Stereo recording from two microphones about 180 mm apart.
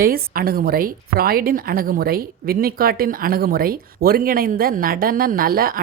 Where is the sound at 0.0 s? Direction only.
55° right (ahead or behind).